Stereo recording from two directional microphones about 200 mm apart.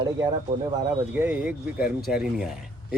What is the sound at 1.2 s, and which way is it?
Speech, 5° right (ahead or behind).